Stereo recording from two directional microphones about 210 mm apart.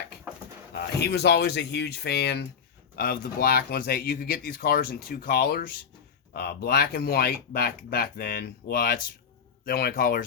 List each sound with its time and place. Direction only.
0.8 s speech: 50° left (ahead or behind)